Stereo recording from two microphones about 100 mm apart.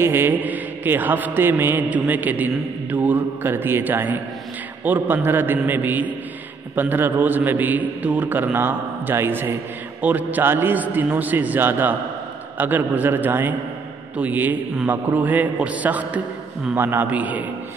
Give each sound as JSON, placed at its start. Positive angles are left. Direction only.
{"t": 0.0, "sound": "mantra", "side_deg": -20}
{"t": 6.7, "sound": "a man's voice", "side_deg": -20}
{"t": 10.0, "sound": "mantra", "side_deg": -15}
{"t": 12.5, "sound": "a man's voice", "side_deg": -20}
{"t": 14.1, "sound": "mantra", "side_deg": -15}